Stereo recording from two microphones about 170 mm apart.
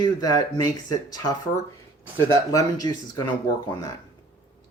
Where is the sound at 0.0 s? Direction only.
20° left (ahead or behind).